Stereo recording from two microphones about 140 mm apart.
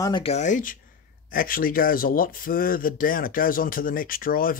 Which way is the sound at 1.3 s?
90° left.